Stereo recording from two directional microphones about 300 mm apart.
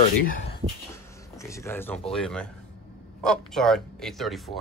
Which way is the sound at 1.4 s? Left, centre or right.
Centre.